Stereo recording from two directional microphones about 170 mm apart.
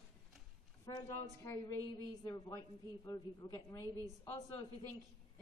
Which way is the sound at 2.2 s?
20° left (ahead or behind).